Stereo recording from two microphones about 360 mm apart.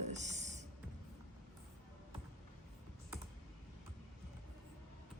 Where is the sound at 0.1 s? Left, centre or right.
Centre.